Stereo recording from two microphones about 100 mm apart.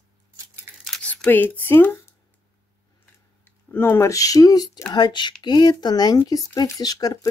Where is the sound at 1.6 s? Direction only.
20° left (ahead or behind).